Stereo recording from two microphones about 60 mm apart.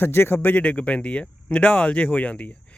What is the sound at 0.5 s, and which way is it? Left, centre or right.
Speech, left.